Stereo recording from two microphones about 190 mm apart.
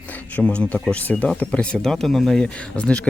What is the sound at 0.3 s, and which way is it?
Speech, 5° left (ahead or behind).